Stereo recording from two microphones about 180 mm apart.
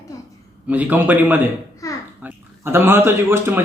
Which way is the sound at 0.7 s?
10° right (ahead or behind).